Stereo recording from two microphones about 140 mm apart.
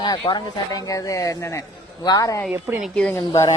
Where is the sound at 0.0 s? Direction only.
35° left (ahead or behind).